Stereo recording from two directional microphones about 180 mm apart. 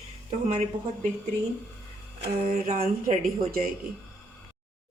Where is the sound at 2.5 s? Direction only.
50° right (ahead or behind).